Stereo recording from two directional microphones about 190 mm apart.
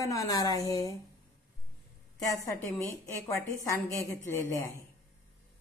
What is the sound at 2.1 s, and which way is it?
A woman's voice, 20° left (ahead or behind).